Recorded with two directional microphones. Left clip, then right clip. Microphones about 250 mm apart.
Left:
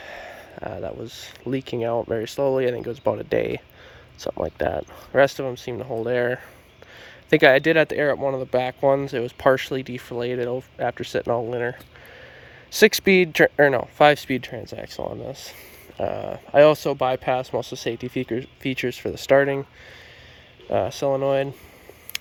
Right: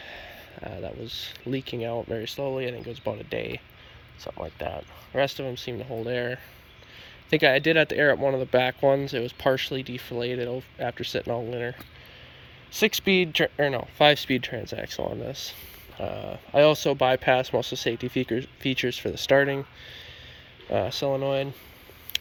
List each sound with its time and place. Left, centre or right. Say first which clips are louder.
0.0 s speech: left 4 dB; centre
4.3 s speech: left 9 dB; left
4.5 s speech: left 9 dB; left; by 11.8 s centre
12.7 s speech: left 6 dB; left